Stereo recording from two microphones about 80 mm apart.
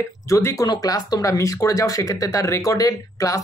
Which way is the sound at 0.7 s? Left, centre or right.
Left.